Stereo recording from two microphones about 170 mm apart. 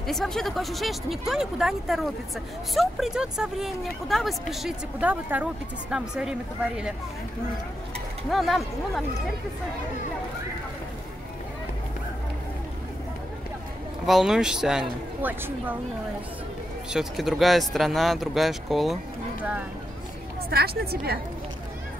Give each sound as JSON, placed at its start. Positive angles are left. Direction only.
{"t": 0.0, "sound": "speech", "side_deg": 0}
{"t": 8.3, "sound": "speech", "side_deg": 0}
{"t": 14.0, "sound": "speech", "side_deg": 0}
{"t": 16.9, "sound": "speech", "side_deg": -5}
{"t": 20.4, "sound": "a woman's voice", "side_deg": -65}